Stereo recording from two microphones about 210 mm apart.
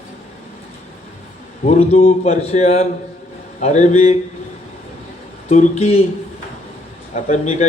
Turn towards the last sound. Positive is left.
turn(degrees=30)  # may be behind; listen again after turning